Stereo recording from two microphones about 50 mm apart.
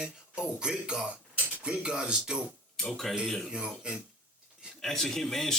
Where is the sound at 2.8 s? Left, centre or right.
Centre.